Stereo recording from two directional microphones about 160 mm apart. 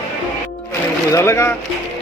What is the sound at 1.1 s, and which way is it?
Speech, 15° left (ahead or behind).